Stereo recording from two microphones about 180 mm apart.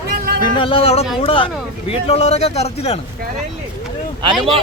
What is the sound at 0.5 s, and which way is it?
Speech, 30° left (ahead or behind).